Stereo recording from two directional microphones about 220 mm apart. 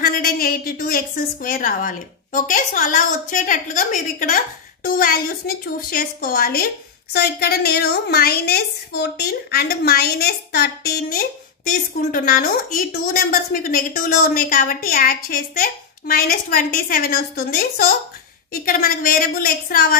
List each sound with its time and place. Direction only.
0.0 s a woman's voice: 40° left (ahead or behind)